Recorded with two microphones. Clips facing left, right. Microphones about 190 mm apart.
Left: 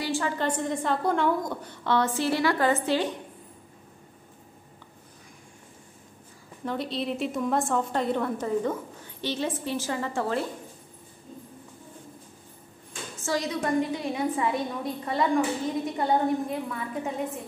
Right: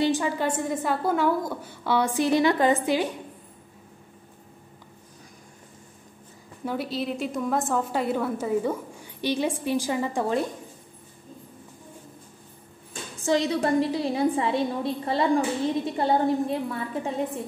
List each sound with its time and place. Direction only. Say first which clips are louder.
0.0 s a woman's voice: right 4 dB; 15° right (ahead or behind)
6.6 s a woman's voice: right 1 dB; 5° right (ahead or behind)
13.2 s a woman's voice: right 5 dB; 25° right (ahead or behind)